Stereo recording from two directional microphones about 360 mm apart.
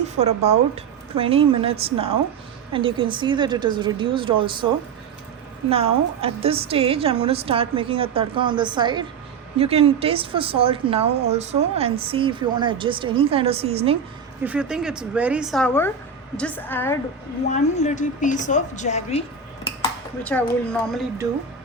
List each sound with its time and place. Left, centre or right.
0.2 s a woman's voice: centre
5.7 s a woman's voice: centre
14.4 s a woman's voice: centre
17.5 s a woman's voice: centre
20.2 s a woman's voice: centre